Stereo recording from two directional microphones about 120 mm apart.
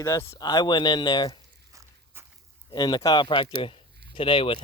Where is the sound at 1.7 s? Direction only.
25° right (ahead or behind).